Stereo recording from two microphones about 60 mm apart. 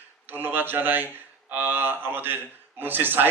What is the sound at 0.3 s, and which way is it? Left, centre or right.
A man's voice, right.